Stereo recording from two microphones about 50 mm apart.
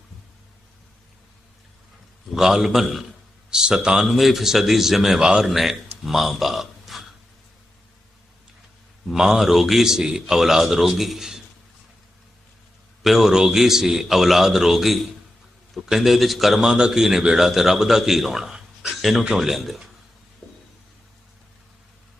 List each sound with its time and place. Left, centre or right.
2.3 s a man's voice: centre
3.5 s speech: centre
4.0 s a man's voice: centre
5.2 s speech: centre
5.5 s a man's voice: centre
9.1 s a man's voice: centre
13.0 s a man's voice: centre